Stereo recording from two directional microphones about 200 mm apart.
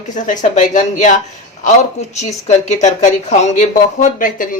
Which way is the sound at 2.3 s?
35° left (ahead or behind).